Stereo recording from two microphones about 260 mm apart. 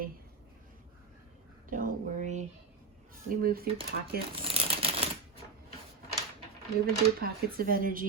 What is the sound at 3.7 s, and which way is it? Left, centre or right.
Speech, right.